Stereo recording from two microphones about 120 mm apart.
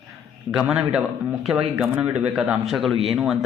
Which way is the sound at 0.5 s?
5° right (ahead or behind).